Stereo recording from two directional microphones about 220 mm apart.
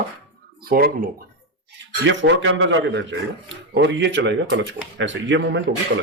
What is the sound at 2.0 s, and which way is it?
Speech, 55° right (ahead or behind).